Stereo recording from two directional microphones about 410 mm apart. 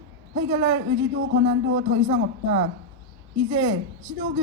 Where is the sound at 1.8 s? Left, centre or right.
Centre.